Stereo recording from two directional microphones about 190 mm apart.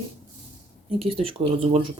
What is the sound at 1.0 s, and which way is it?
Speech, 30° right (ahead or behind).